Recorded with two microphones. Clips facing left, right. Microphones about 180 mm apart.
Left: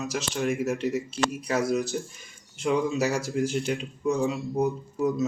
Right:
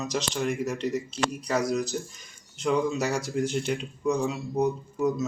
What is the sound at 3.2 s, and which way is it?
Speech, 5° left (ahead or behind).